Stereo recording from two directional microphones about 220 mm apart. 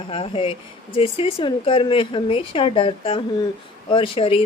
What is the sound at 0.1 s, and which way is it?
A woman's voice, 25° left (ahead or behind).